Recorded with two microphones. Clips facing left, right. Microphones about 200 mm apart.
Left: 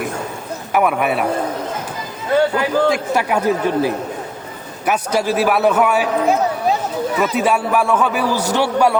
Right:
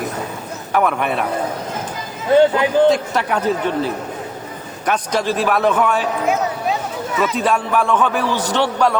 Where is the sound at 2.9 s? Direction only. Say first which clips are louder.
Left 1 dB; 10° left (ahead or behind).